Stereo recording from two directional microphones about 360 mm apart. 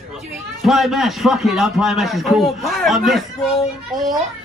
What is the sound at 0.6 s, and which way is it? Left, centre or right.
A man's voice, centre.